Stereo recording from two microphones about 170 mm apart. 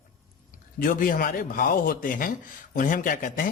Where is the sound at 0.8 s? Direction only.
55° left (ahead or behind).